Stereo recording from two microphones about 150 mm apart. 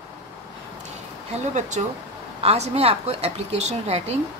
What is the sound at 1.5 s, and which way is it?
Speech, 50° right (ahead or behind).